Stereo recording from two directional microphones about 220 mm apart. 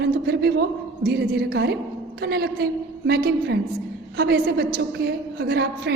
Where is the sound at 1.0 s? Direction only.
45° right (ahead or behind).